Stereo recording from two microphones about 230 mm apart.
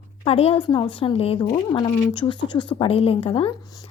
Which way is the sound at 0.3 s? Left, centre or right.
Left.